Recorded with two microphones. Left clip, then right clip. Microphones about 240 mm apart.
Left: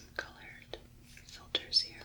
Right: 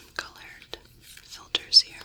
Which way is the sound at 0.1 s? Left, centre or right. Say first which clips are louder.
Right 6 dB; centre.